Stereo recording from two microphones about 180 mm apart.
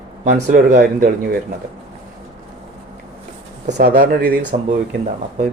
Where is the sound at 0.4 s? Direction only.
45° right (ahead or behind).